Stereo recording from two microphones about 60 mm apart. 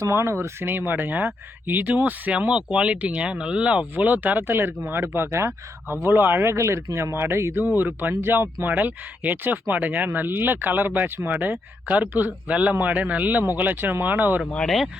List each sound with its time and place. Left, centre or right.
0.0 s speech: right
0.7 s speech: right
2.3 s speech: centre
3.9 s speech: right
7.8 s speech: right